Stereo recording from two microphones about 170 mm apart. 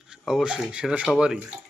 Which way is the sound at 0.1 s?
5° right (ahead or behind).